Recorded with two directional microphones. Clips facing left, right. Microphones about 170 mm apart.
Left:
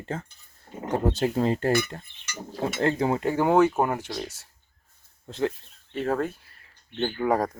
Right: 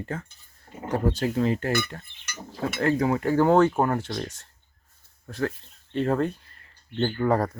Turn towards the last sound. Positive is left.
turn(degrees=10)  # may be behind; listen again after turning